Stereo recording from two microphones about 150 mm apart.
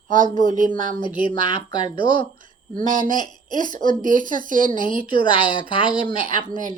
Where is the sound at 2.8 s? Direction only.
60° right (ahead or behind).